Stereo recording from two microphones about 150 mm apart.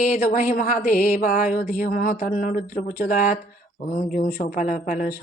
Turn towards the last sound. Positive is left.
turn(degrees=65)  # may be behind; listen again after turning